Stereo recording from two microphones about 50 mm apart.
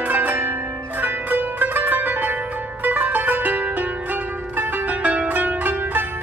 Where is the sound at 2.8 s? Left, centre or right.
Right.